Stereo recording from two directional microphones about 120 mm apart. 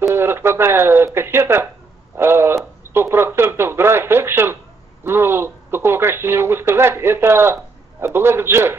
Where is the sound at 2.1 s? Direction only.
20° right (ahead or behind).